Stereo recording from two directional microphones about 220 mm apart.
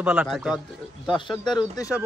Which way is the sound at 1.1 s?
20° left (ahead or behind).